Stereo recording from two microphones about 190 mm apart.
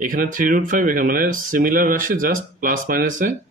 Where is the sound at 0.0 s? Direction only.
45° right (ahead or behind).